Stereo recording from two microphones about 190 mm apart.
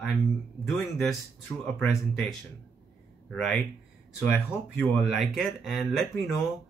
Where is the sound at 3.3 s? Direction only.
5° left (ahead or behind).